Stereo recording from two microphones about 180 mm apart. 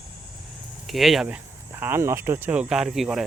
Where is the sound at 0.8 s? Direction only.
Centre (ahead or behind).